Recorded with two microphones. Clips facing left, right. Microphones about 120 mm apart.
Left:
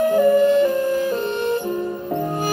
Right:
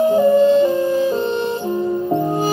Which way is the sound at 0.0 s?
25° right (ahead or behind).